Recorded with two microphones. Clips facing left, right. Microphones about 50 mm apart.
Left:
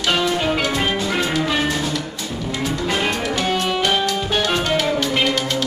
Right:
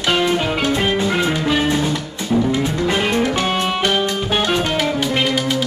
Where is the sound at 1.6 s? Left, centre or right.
Right.